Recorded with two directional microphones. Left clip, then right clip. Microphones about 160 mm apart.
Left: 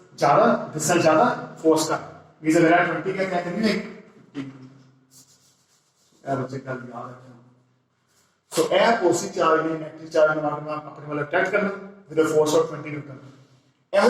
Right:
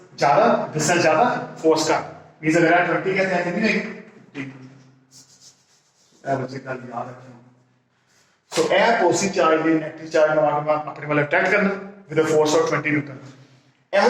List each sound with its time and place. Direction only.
0.2 s a man's voice: 20° right (ahead or behind)
6.2 s a man's voice: 25° right (ahead or behind)
8.4 s a man's voice: 25° right (ahead or behind)